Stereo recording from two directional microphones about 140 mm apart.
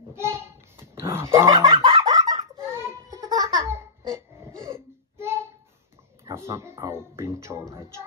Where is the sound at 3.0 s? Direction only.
25° right (ahead or behind).